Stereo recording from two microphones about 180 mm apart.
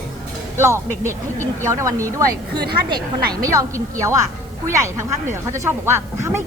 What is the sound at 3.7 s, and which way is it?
Speech, 15° right (ahead or behind).